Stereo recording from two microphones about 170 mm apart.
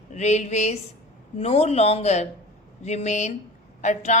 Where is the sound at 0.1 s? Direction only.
45° left (ahead or behind).